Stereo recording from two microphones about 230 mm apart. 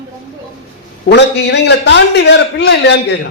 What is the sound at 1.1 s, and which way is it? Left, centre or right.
A man's voice, left.